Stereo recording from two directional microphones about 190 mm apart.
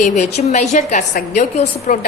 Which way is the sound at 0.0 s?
35° left (ahead or behind).